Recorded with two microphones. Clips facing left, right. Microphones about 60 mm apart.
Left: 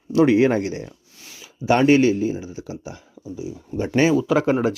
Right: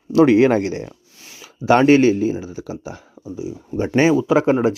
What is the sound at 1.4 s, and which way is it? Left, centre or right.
Speech, right.